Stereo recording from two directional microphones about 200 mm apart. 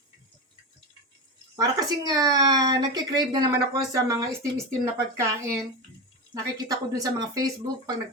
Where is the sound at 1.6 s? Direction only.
20° right (ahead or behind).